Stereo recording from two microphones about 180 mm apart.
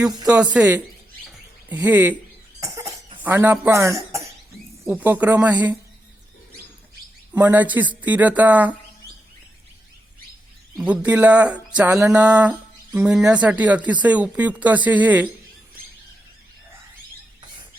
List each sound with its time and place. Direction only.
0.1 s a woman's voice: 20° right (ahead or behind)
0.3 s speech: 10° right (ahead or behind)
3.2 s speech: 10° right (ahead or behind)
7.3 s speech: 10° right (ahead or behind)
10.8 s speech: 10° right (ahead or behind)